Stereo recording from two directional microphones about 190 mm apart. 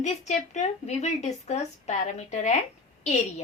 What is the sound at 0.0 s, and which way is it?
A woman's voice, 40° left (ahead or behind).